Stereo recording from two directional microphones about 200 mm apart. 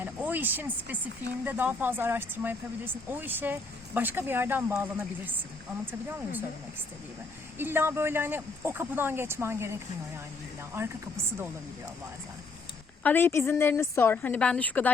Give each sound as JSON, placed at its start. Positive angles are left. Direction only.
{"t": 0.0, "sound": "speech", "side_deg": -10}
{"t": 7.6, "sound": "speech", "side_deg": -10}
{"t": 13.0, "sound": "a woman's voice", "side_deg": 10}